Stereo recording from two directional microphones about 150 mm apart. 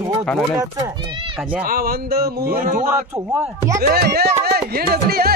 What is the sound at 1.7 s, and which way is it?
Speech, 80° right.